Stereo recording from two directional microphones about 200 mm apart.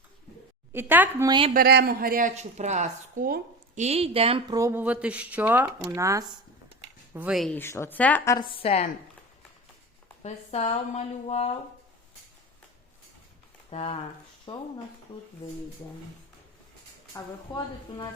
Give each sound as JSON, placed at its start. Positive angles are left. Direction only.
{"t": 0.7, "sound": "a woman's voice", "side_deg": -10}
{"t": 1.3, "sound": "speech", "side_deg": -25}
{"t": 1.5, "sound": "a woman's voice", "side_deg": -50}
{"t": 3.8, "sound": "a woman's voice", "side_deg": -30}
{"t": 7.6, "sound": "a woman's voice", "side_deg": 10}
{"t": 8.4, "sound": "speech", "side_deg": 30}
{"t": 10.2, "sound": "speech", "side_deg": 30}
{"t": 13.7, "sound": "a woman's voice", "side_deg": 30}
{"t": 17.5, "sound": "a woman's voice", "side_deg": 20}